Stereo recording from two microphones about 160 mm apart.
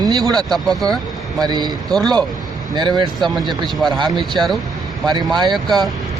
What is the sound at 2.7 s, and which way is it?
Speech, 25° right (ahead or behind).